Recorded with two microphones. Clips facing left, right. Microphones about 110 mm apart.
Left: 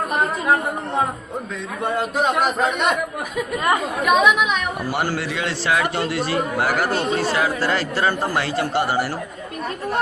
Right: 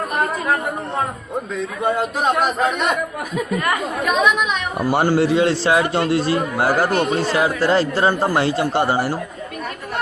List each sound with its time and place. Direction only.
1.8 s a man's voice: centre (ahead or behind)
4.0 s a man's voice: 5° left (ahead or behind)
4.8 s a man's voice: 30° right (ahead or behind)